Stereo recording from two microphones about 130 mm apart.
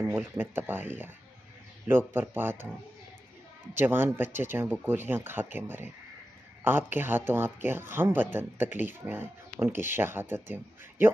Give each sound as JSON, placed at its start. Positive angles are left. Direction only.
{"t": 0.0, "sound": "speech", "side_deg": -15}
{"t": 3.7, "sound": "speech", "side_deg": -15}